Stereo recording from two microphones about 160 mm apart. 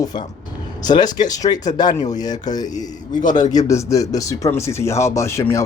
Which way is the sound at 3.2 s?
50° left (ahead or behind).